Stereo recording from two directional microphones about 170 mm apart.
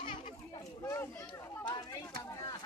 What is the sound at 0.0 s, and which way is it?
Children playing, 35° left (ahead or behind).